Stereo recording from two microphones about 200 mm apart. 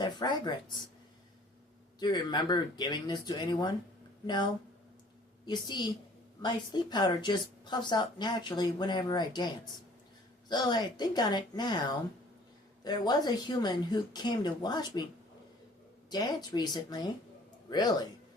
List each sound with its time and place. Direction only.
0.0 s a woman's voice: 20° left (ahead or behind)
2.0 s a woman's voice: 20° left (ahead or behind)
5.5 s a woman's voice: 20° left (ahead or behind)
10.5 s a woman's voice: 20° left (ahead or behind)
16.0 s a woman's voice: 20° left (ahead or behind)